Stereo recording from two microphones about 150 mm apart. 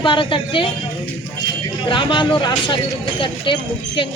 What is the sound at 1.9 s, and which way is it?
Speech, 30° left (ahead or behind).